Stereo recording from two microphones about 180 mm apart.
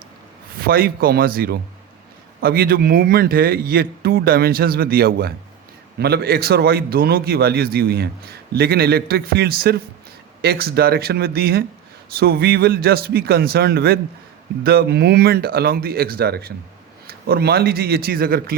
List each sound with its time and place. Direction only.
0.6 s a man's voice: 55° right (ahead or behind)